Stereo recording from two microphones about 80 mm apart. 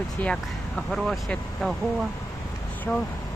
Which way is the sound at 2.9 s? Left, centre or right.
Centre.